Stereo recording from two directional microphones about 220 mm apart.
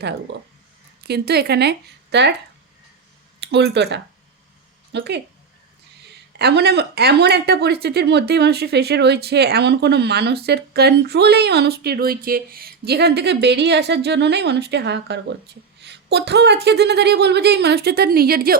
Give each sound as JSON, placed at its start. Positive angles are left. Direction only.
{"t": 0.0, "sound": "speech", "side_deg": -50}
{"t": 3.4, "sound": "speech", "side_deg": -50}
{"t": 6.4, "sound": "speech", "side_deg": -50}